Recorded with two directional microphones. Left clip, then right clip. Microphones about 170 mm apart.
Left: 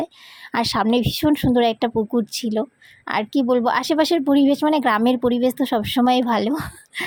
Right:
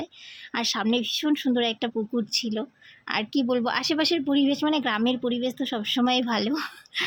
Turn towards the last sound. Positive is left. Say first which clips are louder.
# left 3 dB
turn(degrees=25)  # may be behind; listen again after turning